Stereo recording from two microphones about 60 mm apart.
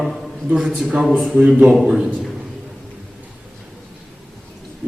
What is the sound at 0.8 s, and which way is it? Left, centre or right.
Speech, centre.